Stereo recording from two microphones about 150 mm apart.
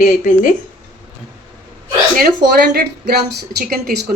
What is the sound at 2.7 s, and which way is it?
A woman's voice, 90° right.